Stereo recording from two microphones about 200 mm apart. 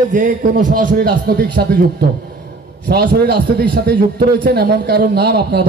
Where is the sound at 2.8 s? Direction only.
55° right (ahead or behind).